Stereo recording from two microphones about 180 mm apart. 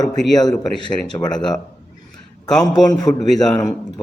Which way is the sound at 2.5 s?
5° left (ahead or behind).